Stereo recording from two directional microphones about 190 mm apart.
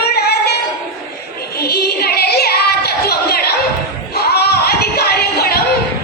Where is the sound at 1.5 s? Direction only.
55° left (ahead or behind).